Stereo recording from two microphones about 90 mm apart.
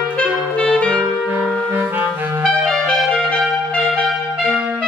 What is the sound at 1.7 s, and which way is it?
Clarinet, 15° right (ahead or behind).